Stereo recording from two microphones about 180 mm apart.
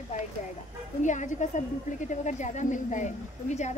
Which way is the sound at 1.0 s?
45° left (ahead or behind).